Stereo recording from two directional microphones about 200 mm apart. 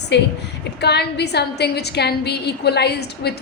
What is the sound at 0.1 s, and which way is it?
A woman's voice, 60° left (ahead or behind).